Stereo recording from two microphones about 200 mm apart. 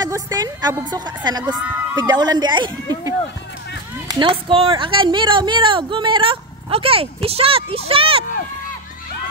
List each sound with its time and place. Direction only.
0.0 s speech: 20° right (ahead or behind)